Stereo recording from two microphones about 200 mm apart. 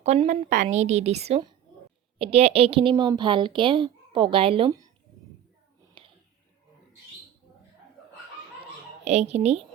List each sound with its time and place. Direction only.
0.0 s a woman's voice: 35° right (ahead or behind)
6.0 s a sound: 25° right (ahead or behind)
9.0 s a woman's voice: 35° right (ahead or behind)